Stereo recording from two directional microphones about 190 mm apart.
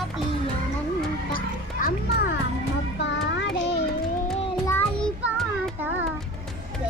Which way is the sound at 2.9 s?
70° left (ahead or behind).